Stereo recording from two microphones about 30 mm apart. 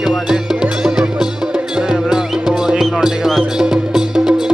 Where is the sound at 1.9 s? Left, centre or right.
Centre.